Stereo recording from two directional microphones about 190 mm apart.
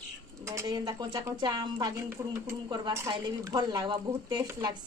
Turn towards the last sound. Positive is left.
turn(degrees=-20)  # may be behind; listen again after turning